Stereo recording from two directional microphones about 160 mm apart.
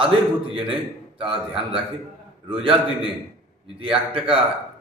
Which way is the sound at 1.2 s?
35° right (ahead or behind).